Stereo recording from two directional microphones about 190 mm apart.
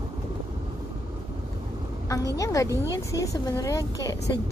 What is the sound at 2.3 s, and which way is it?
Speech, 15° left (ahead or behind).